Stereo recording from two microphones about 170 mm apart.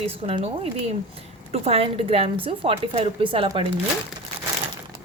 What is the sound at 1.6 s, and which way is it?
Speech, 35° right (ahead or behind).